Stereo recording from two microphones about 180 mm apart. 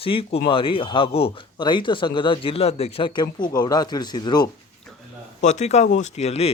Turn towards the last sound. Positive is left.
turn(degrees=35)  # may be behind; listen again after turning